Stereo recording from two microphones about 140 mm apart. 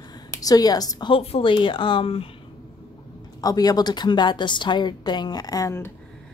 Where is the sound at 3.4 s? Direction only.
25° left (ahead or behind).